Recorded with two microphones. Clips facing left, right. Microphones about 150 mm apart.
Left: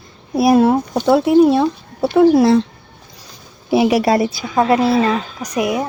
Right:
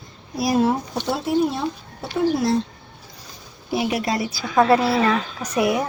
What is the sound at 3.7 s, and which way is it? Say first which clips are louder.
Speech: left 9 dB; 90° left.